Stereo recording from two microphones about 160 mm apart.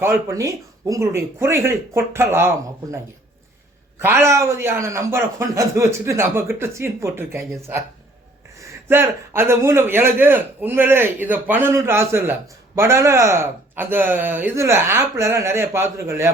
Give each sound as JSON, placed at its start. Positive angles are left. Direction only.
{"t": 0.0, "sound": "a man's voice", "side_deg": -15}
{"t": 3.9, "sound": "a man's voice", "side_deg": -15}
{"t": 8.9, "sound": "a man's voice", "side_deg": -15}